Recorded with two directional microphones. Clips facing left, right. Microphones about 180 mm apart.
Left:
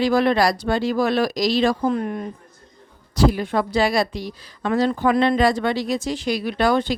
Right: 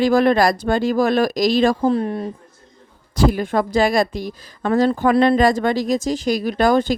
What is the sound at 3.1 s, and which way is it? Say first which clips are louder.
A woman's voice: right 1 dB; 50° right (ahead or behind).